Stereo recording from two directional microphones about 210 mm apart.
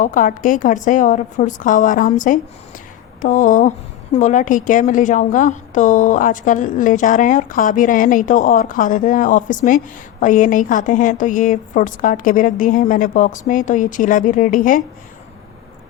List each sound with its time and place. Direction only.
0.0 s a woman's voice: 40° left (ahead or behind)